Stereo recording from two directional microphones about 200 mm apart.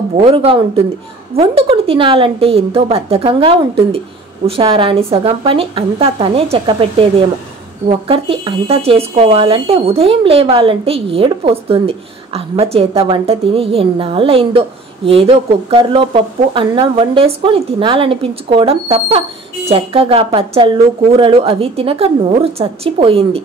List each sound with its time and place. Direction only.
0.2 s speech: 30° right (ahead or behind)
8.1 s speech: 25° right (ahead or behind)